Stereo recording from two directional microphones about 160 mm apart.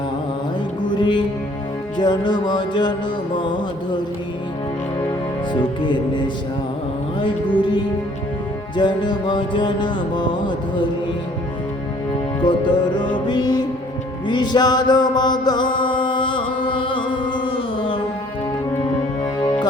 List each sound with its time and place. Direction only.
0.9 s music: 30° left (ahead or behind)
5.5 s music: 30° left (ahead or behind)
12.4 s music: 30° left (ahead or behind)